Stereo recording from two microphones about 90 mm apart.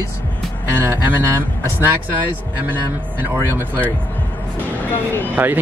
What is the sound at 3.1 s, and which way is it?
Speech, 25° right (ahead or behind).